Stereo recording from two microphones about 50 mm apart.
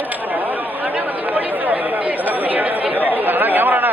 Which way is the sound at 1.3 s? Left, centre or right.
Right.